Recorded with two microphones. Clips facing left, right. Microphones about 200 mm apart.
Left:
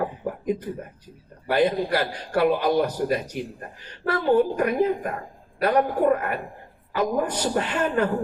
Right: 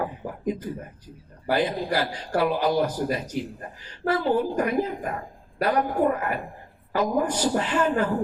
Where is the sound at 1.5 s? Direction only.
60° left (ahead or behind).